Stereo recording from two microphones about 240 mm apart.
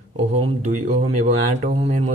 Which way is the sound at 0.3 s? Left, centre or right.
Right.